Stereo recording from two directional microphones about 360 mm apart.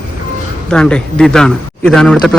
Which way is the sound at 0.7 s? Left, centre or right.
Centre.